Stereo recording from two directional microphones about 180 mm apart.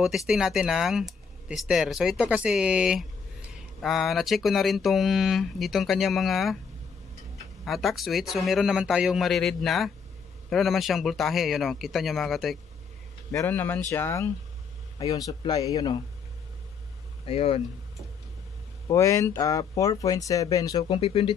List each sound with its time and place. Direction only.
0.0 s speech: 5° right (ahead or behind)
7.6 s speech: centre (ahead or behind)
13.3 s speech: 15° left (ahead or behind)
17.3 s speech: 35° left (ahead or behind)
18.9 s speech: 15° left (ahead or behind)
21.0 s speech: 35° left (ahead or behind)